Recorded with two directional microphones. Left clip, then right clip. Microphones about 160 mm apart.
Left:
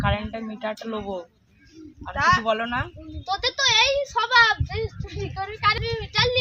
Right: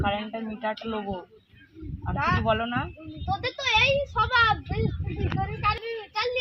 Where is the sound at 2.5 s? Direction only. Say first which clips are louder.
Left 2 dB; 40° left (ahead or behind).